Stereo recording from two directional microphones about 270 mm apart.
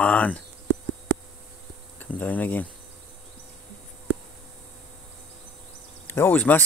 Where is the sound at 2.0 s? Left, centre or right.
Centre.